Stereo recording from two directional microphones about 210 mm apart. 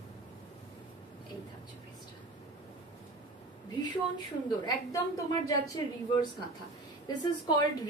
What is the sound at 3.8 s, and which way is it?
A woman's voice, 20° left (ahead or behind).